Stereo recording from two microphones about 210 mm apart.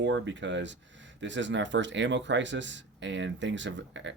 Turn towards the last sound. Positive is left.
turn(degrees=-60)  # may be behind; listen again after turning